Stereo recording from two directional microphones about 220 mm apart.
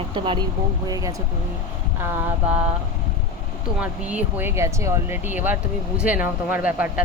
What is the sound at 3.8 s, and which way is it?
Speech, 5° right (ahead or behind).